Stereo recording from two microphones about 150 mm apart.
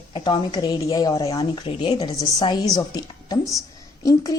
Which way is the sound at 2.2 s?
25° left (ahead or behind).